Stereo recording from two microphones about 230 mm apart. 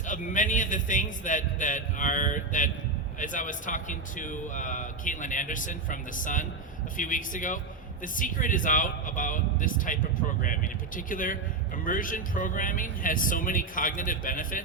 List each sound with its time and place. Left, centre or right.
0.1 s a man's voice: left